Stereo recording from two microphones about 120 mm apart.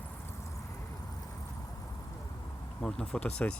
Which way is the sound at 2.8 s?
5° left (ahead or behind).